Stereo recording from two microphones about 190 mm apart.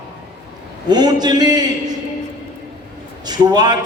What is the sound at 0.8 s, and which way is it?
Speech, 20° right (ahead or behind).